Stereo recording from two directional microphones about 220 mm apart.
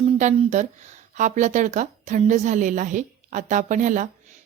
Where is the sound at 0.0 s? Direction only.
30° right (ahead or behind).